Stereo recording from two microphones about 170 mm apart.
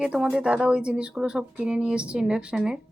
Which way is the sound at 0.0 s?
5° right (ahead or behind).